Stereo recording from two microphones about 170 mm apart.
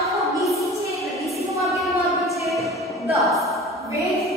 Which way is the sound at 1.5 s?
20° right (ahead or behind).